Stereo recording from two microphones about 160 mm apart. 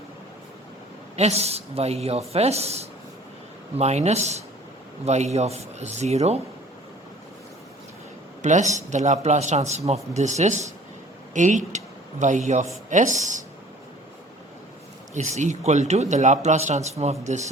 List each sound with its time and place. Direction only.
1.1 s a man's voice: 40° right (ahead or behind)
8.4 s a woman's voice: 50° right (ahead or behind)
15.1 s a man's voice: 45° right (ahead or behind)